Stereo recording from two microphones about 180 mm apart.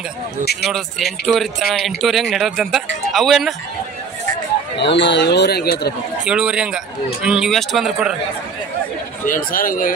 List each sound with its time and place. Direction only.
0.7 s speech: centre (ahead or behind)
4.7 s a man's voice: 75° left (ahead or behind)
6.2 s speech: 5° right (ahead or behind)
9.2 s speech: 50° left (ahead or behind)